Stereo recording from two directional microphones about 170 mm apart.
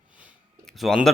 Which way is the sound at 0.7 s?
Centre (ahead or behind).